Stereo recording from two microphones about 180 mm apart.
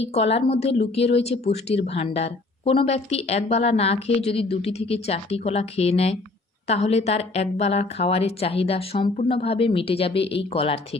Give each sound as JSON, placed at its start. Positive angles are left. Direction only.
{"t": 0.1, "sound": "a woman's voice", "side_deg": 35}